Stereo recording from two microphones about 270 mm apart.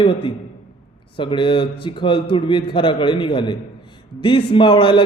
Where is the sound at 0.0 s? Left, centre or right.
Centre.